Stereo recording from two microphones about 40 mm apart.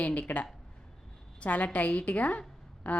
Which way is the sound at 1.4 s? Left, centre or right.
Left.